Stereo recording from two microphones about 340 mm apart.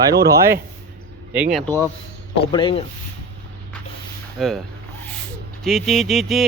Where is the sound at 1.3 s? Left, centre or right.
Centre.